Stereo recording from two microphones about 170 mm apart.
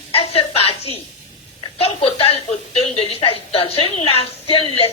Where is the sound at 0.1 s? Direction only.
35° left (ahead or behind).